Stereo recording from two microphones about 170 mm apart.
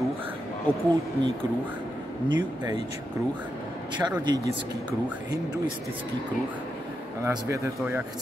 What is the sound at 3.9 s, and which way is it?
Speech, 25° right (ahead or behind).